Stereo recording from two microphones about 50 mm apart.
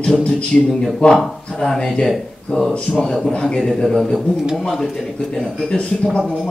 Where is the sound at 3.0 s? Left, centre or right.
Centre.